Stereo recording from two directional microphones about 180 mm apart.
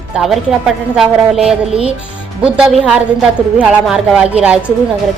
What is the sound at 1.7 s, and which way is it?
Speech, 30° right (ahead or behind).